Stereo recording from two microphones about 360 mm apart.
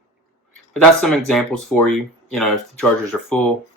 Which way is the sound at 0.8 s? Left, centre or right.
Centre.